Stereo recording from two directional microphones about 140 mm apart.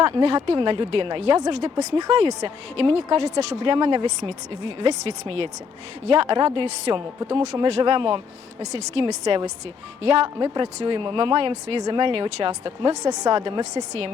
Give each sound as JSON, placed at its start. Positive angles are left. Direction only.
{"t": 0.0, "sound": "speech", "side_deg": -45}